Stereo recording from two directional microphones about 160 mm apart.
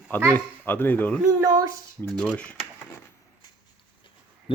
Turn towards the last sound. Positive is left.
turn(degrees=35)  # may be behind; listen again after turning